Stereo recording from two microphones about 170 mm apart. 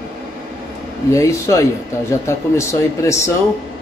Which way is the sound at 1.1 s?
15° left (ahead or behind).